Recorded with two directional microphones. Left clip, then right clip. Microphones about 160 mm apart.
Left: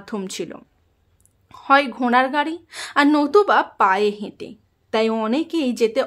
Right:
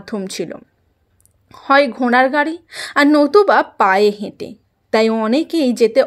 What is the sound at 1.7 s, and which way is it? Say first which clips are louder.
A woman's voice: right 3 dB; 25° right (ahead or behind).